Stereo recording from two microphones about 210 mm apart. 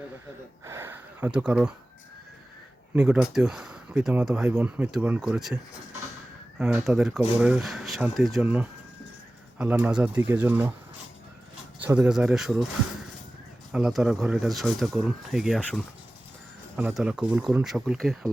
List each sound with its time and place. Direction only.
0.6 s speech: 10° right (ahead or behind)
2.9 s speech: 5° right (ahead or behind)
6.6 s speech: 5° right (ahead or behind)
11.8 s speech: 5° right (ahead or behind)